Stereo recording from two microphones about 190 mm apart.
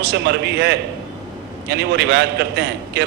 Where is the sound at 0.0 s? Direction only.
60° right (ahead or behind).